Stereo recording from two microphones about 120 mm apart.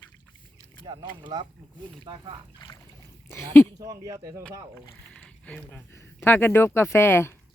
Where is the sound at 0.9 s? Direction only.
40° right (ahead or behind).